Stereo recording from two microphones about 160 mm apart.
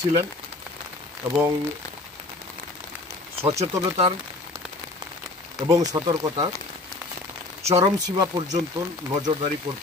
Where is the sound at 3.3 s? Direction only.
40° right (ahead or behind).